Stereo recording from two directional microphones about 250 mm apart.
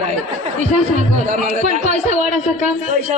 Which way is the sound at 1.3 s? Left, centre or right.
Right.